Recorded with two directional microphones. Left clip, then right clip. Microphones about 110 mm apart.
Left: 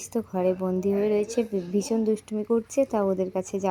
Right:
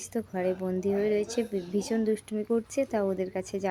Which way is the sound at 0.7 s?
35° left (ahead or behind).